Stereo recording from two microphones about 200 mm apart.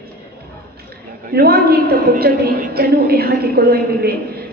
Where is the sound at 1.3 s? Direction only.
50° right (ahead or behind).